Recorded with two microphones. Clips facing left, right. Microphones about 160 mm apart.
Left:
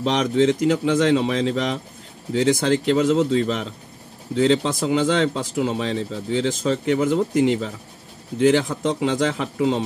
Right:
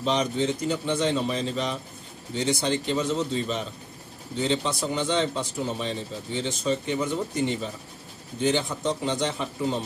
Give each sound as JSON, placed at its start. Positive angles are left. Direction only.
{"t": 0.0, "sound": "speech", "side_deg": 90}